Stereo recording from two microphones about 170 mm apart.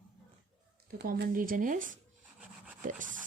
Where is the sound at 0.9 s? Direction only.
70° right (ahead or behind); by 2.0 s 50° right (ahead or behind).